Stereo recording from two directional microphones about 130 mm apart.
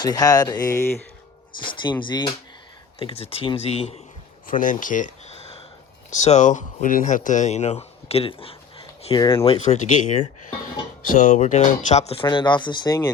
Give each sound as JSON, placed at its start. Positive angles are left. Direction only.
{"t": 0.0, "sound": "speech", "side_deg": 30}
{"t": 1.7, "sound": "speech", "side_deg": 35}
{"t": 3.0, "sound": "speech", "side_deg": 45}
{"t": 4.4, "sound": "speech", "side_deg": 90}
{"t": 9.7, "sound": "speech", "side_deg": 70}
{"t": 11.3, "sound": "speech", "side_deg": 70}
{"t": 12.2, "sound": "speech", "side_deg": 35}